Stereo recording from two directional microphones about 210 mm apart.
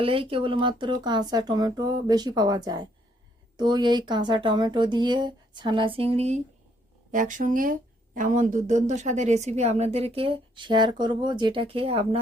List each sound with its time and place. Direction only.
0.0 s speech: 25° right (ahead or behind)